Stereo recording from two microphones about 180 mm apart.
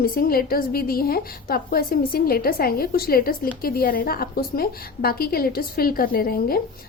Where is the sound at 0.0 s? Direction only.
55° left (ahead or behind).